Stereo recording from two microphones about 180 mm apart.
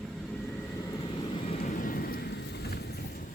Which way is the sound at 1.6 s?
50° left (ahead or behind).